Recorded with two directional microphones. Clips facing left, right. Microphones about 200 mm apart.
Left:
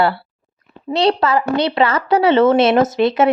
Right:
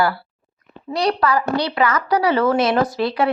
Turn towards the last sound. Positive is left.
turn(degrees=20)  # may be behind; listen again after turning